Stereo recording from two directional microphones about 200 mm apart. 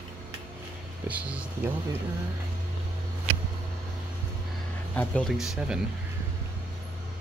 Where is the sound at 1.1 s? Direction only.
5° right (ahead or behind).